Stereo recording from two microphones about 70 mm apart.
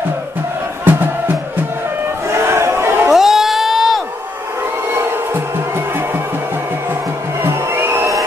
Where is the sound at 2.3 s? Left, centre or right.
Right.